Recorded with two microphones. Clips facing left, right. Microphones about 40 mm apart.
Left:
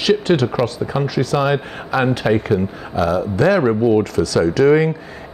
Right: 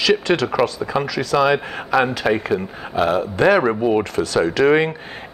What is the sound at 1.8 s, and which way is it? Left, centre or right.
Speech, centre.